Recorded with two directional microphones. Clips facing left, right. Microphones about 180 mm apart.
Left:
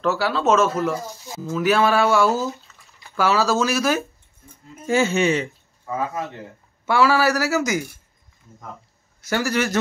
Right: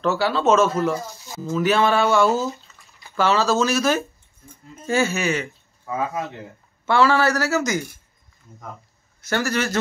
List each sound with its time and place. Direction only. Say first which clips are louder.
0.0 s speech: right 1 dB; centre (ahead or behind); by 5.5 s 30° left (ahead or behind)
5.9 s speech: even; 15° right (ahead or behind)
6.9 s speech: even; 5° left (ahead or behind)
9.3 s speech: left 1 dB; 15° left (ahead or behind)